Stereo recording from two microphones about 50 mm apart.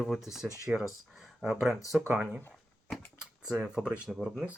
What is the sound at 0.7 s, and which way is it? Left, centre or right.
Speech, centre.